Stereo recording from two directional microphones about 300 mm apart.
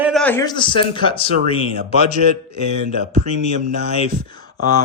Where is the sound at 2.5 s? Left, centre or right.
Left.